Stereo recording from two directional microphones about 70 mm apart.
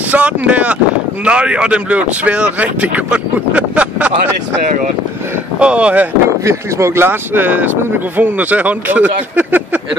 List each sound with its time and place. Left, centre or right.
0.1 s a man's voice: centre
5.6 s a man's voice: centre
6.4 s speech: right